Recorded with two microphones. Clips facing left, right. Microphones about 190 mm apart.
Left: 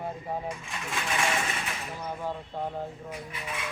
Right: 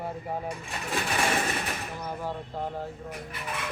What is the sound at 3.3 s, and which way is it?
Speech, 55° right (ahead or behind).